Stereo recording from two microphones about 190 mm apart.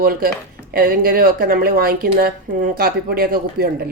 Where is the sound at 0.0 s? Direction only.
50° right (ahead or behind).